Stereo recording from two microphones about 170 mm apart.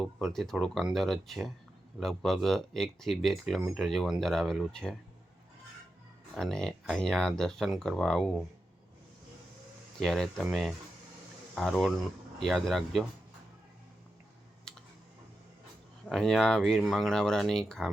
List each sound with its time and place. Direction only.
0.3 s speech: centre (ahead or behind)
6.3 s speech: 5° left (ahead or behind)
10.0 s speech: centre (ahead or behind)
11.5 s speech: centre (ahead or behind)
14.7 s typing: 5° left (ahead or behind)
16.0 s speech: centre (ahead or behind)